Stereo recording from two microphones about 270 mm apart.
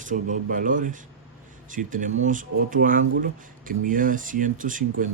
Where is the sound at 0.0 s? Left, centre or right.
Right.